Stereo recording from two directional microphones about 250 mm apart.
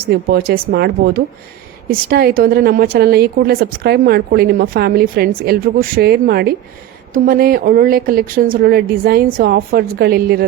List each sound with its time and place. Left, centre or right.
0.3 s a woman's voice: right